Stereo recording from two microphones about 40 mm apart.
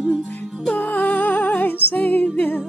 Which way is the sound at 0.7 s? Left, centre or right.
Left.